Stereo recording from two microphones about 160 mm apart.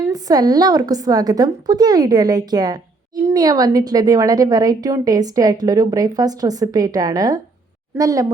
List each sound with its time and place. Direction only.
0.0 s a woman's voice: 25° right (ahead or behind)